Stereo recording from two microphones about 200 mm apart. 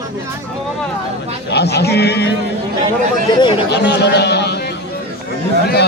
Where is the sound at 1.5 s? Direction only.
55° left (ahead or behind).